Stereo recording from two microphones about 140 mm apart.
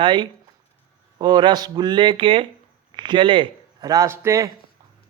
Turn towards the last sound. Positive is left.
turn(degrees=-20)  # may be behind; listen again after turning